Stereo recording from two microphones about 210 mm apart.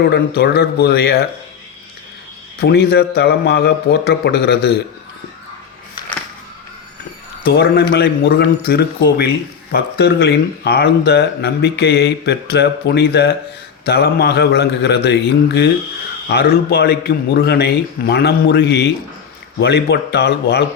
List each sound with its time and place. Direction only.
0.0 s speech: 50° left (ahead or behind)
2.6 s speech: 50° left (ahead or behind)
7.4 s speech: 50° left (ahead or behind)